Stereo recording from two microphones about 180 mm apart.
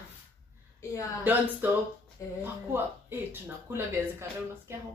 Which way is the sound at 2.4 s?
10° right (ahead or behind).